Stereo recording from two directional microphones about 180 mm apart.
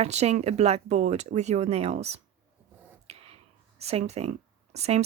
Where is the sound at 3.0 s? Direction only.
35° right (ahead or behind).